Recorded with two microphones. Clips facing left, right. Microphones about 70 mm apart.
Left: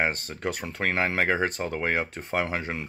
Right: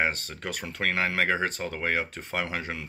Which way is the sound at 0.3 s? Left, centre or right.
Left.